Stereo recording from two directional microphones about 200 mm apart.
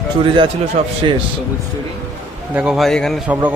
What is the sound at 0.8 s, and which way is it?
Speech, 30° right (ahead or behind).